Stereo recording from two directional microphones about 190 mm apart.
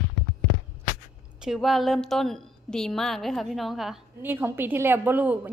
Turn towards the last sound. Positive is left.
turn(degrees=-10)  # may be behind; listen again after turning